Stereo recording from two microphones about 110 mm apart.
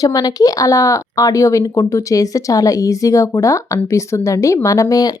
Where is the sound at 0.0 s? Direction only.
35° left (ahead or behind).